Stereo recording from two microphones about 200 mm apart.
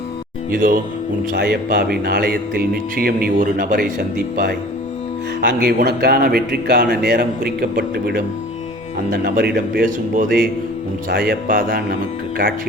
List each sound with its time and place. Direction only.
0.5 s speech: 45° right (ahead or behind)